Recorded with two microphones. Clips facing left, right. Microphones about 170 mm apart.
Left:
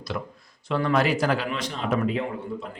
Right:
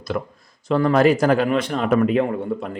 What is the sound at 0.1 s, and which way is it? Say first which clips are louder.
Speech: right 6 dB; 45° right (ahead or behind).